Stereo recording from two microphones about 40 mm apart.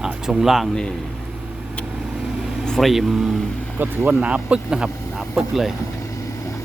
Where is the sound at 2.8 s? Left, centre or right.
Centre.